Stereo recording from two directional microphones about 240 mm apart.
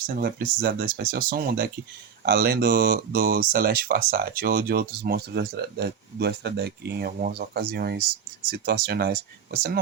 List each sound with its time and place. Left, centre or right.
0.2 s speech: right